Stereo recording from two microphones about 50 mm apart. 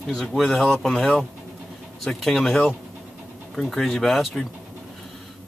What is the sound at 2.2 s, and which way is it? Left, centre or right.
Speech, centre.